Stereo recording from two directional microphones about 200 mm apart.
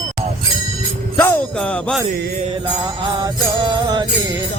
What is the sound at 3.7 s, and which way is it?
Music, 20° right (ahead or behind).